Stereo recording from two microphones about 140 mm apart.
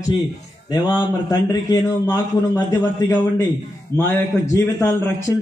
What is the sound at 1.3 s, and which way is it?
A man's voice, 30° left (ahead or behind).